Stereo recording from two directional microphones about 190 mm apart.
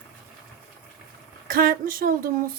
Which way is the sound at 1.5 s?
50° right (ahead or behind).